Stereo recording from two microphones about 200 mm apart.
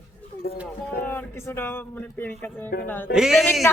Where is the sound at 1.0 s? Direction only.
10° left (ahead or behind).